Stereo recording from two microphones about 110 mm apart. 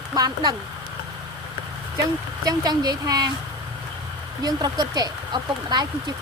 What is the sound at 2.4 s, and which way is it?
Speech, 35° right (ahead or behind).